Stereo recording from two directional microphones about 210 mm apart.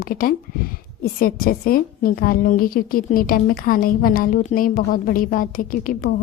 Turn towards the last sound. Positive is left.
turn(degrees=45)  # may be behind; listen again after turning